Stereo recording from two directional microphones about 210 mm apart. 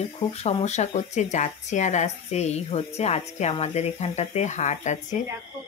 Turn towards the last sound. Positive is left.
turn(degrees=35)  # may be behind; listen again after turning